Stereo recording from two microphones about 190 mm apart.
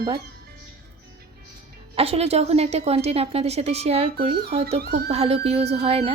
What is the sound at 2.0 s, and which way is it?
Speech, 30° right (ahead or behind).